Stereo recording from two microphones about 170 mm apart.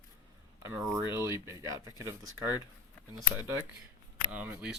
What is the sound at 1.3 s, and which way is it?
Speech, 25° left (ahead or behind).